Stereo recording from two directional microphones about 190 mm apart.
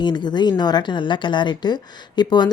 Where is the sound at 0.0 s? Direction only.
25° left (ahead or behind).